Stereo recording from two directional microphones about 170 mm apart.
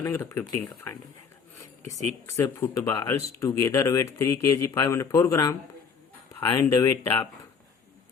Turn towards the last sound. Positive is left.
turn(degrees=20)  # may be behind; listen again after turning